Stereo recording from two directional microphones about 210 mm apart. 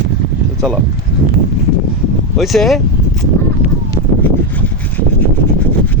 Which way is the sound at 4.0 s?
25° right (ahead or behind).